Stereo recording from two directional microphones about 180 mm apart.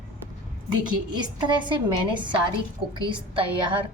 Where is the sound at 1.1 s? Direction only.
25° right (ahead or behind).